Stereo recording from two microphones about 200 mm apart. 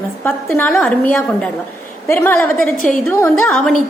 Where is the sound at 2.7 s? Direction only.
45° left (ahead or behind).